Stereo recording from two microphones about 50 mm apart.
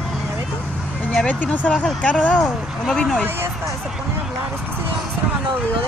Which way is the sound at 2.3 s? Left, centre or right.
Centre.